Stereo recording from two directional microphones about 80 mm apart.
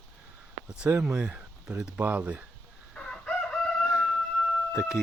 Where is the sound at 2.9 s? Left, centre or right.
Centre.